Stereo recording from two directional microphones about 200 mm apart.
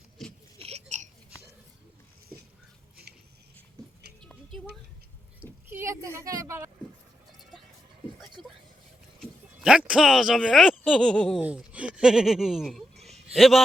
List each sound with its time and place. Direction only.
0.6 s hiccup: 35° right (ahead or behind)
4.2 s music: 5° left (ahead or behind)
5.6 s a sound: 10° right (ahead or behind)
9.2 s a man's voice: 5° right (ahead or behind)